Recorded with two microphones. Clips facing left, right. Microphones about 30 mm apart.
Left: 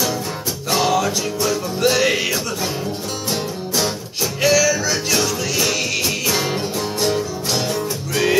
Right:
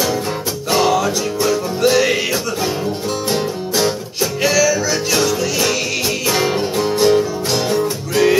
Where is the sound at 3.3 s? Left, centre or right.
Centre.